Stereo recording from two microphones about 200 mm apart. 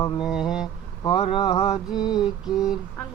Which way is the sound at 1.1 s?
30° left (ahead or behind).